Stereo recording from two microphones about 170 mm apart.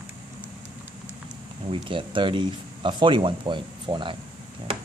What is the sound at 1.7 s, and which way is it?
Speech, 30° right (ahead or behind).